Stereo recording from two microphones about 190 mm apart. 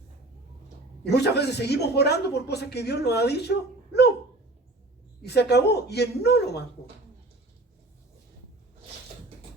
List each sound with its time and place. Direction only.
1.1 s speech: 60° left (ahead or behind)
5.2 s speech: 60° left (ahead or behind)